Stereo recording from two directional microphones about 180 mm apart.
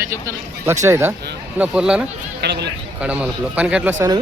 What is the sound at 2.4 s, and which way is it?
Speech, 70° right (ahead or behind).